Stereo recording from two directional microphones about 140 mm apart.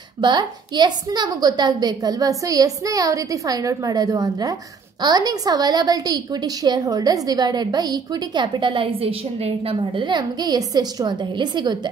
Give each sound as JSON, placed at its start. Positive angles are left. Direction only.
{"t": 0.2, "sound": "a woman's voice", "side_deg": -30}